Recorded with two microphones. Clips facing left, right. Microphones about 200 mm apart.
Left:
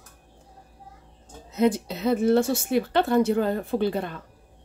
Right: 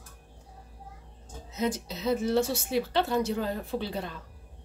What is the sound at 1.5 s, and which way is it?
A woman's voice, 60° left (ahead or behind).